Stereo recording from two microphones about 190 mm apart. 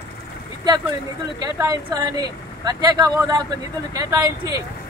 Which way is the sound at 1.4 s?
20° right (ahead or behind).